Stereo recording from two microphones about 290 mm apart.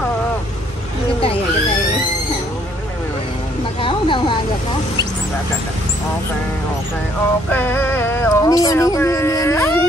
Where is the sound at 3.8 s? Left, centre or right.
Centre.